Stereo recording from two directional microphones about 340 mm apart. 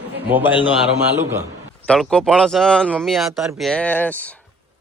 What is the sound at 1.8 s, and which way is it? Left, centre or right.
Speech, centre.